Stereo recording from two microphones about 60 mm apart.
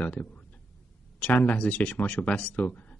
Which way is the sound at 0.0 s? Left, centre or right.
Left.